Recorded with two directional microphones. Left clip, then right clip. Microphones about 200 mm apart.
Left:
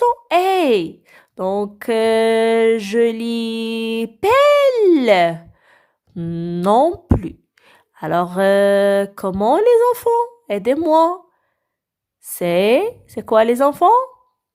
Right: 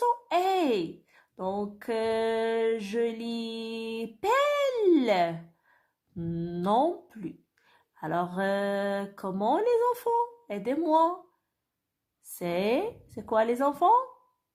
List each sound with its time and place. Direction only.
0.0 s speech: 40° left (ahead or behind)
12.4 s speech: 40° left (ahead or behind)